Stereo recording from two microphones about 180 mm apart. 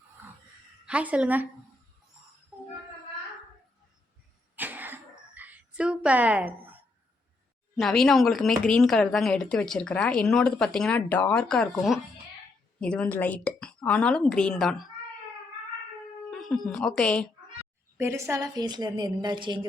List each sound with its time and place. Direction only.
0.9 s a woman's voice: 5° right (ahead or behind)
4.5 s cough: 10° right (ahead or behind)
7.8 s speech: 5° left (ahead or behind)
12.8 s speech: 5° left (ahead or behind)
16.3 s speech: centre (ahead or behind)
17.9 s a woman's voice: 15° right (ahead or behind)